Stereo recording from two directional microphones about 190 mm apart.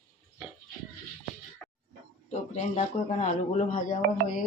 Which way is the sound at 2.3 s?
35° left (ahead or behind).